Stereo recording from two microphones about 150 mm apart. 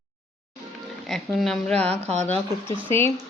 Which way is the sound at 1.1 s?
Centre (ahead or behind).